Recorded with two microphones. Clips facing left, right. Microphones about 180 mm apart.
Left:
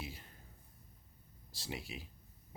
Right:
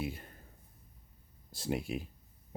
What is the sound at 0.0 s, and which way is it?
Speech, 55° right (ahead or behind).